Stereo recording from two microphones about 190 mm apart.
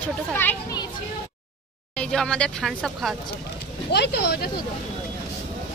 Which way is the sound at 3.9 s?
60° left (ahead or behind).